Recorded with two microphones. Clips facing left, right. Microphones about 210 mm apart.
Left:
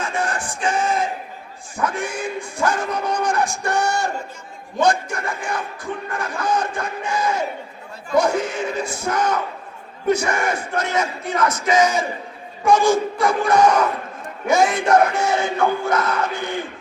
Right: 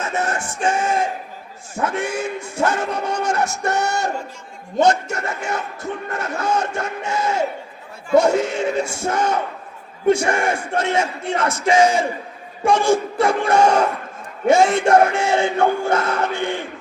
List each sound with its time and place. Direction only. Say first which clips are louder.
0.0 s music: right 1 dB; 25° right (ahead or behind)
1.7 s speech: right 2 dB; 25° right (ahead or behind)